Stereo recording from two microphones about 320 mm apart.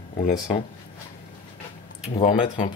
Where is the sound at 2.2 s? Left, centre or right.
Left.